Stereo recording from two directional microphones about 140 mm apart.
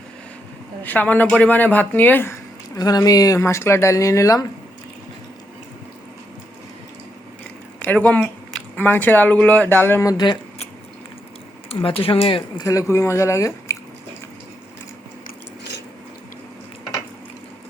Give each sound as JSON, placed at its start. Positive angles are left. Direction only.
{"t": 0.8, "sound": "speech", "side_deg": 10}
{"t": 7.8, "sound": "a sound", "side_deg": 10}
{"t": 8.8, "sound": "speech", "side_deg": 15}
{"t": 11.7, "sound": "speech", "side_deg": 40}
{"t": 12.6, "sound": "speech", "side_deg": 20}